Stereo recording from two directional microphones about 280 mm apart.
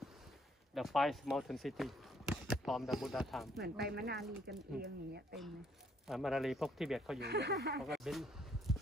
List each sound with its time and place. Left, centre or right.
0.7 s speech: centre
3.8 s speech: right
6.0 s speech: centre
7.2 s speech: right
7.8 s a sound: centre